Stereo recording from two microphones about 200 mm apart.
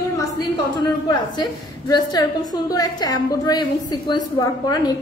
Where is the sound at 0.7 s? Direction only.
20° left (ahead or behind).